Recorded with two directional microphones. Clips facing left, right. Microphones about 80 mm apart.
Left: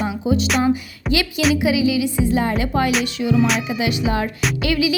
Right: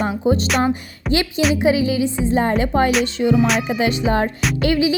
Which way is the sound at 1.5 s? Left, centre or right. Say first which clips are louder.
Right 1 dB; right.